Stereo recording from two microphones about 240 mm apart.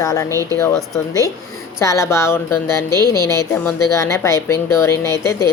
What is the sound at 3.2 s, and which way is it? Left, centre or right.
A woman's voice, centre.